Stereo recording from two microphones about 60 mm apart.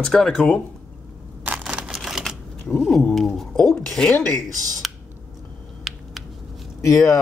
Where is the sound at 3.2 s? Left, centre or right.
Centre.